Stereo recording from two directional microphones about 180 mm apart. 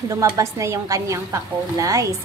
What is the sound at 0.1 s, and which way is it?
A woman's voice, 15° right (ahead or behind).